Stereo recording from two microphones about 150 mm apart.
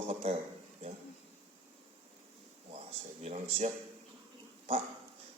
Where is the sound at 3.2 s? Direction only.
45° right (ahead or behind).